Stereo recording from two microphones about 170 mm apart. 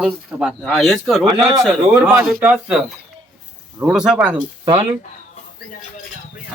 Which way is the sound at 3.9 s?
5° right (ahead or behind).